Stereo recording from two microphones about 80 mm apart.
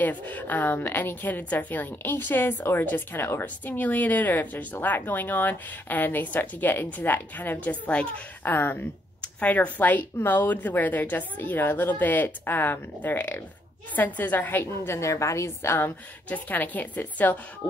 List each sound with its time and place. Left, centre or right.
0.0 s a woman's voice: left
16.3 s a woman's voice: left